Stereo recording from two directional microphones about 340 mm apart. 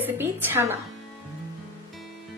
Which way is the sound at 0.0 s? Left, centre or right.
Centre.